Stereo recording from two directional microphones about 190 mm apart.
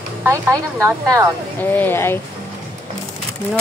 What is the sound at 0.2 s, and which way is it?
Speech, 15° right (ahead or behind).